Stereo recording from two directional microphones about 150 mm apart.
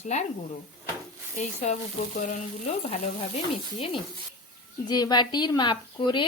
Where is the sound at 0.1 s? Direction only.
50° left (ahead or behind).